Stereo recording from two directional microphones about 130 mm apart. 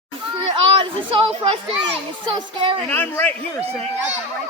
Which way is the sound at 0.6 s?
45° right (ahead or behind).